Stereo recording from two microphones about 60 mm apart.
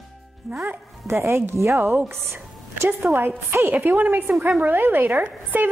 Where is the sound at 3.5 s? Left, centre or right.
Right.